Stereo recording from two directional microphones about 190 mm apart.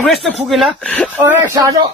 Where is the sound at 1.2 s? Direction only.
15° right (ahead or behind).